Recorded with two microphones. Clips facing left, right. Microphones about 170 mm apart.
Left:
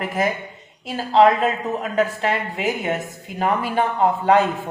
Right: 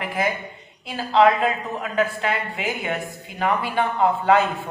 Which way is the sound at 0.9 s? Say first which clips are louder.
Left 2 dB; 40° left (ahead or behind).